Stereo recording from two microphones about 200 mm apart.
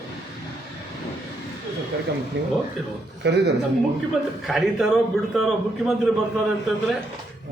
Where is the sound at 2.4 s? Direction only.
60° right (ahead or behind).